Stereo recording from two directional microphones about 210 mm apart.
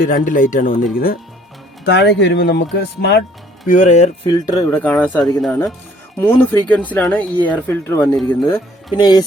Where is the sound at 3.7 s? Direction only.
35° left (ahead or behind).